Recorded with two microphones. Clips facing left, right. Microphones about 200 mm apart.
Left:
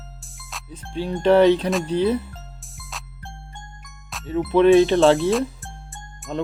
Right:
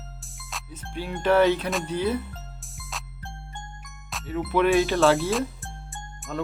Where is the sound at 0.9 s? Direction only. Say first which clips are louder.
Left 5 dB; 25° left (ahead or behind).